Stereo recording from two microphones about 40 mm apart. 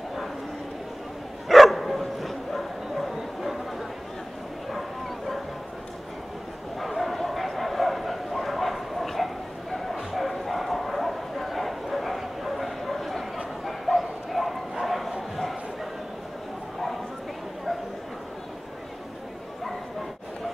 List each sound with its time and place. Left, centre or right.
1.5 s bow-wow: centre
4.6 s bow-wow: centre
6.8 s bow-wow: centre